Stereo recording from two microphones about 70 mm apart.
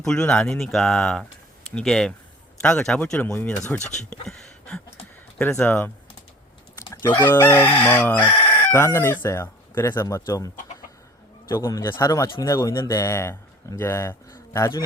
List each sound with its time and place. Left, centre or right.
0.0 s speech: centre
3.9 s a sound: centre
5.5 s chicken: left
7.0 s chicken: left
9.2 s speech: left
11.5 s speech: left